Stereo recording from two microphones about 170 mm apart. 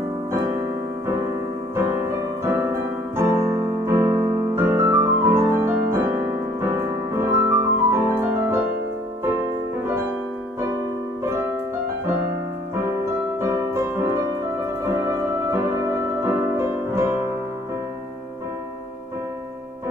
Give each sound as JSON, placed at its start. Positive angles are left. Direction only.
{"t": 3.2, "sound": "piano", "side_deg": -15}
{"t": 6.6, "sound": "music", "side_deg": -15}
{"t": 11.2, "sound": "music", "side_deg": -15}
{"t": 13.4, "sound": "music", "side_deg": -15}